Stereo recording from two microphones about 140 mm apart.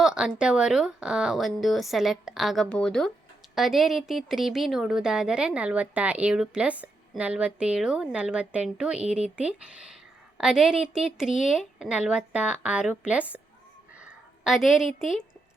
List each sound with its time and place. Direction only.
0.0 s a woman's voice: 5° right (ahead or behind)